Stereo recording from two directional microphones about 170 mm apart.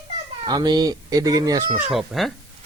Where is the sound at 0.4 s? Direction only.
25° right (ahead or behind).